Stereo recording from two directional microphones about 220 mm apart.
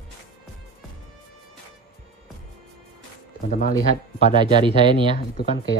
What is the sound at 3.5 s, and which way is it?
Speech, 35° left (ahead or behind).